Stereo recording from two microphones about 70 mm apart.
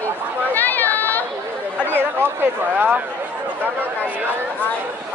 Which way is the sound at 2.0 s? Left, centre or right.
Right.